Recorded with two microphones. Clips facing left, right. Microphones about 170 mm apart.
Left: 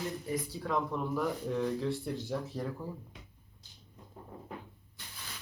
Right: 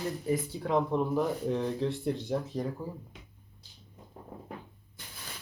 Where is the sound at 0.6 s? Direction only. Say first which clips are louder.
Right 6 dB; 25° right (ahead or behind).